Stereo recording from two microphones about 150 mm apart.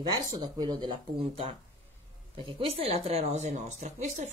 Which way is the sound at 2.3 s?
35° right (ahead or behind).